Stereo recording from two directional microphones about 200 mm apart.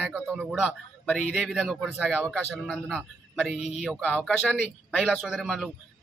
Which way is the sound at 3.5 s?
35° left (ahead or behind).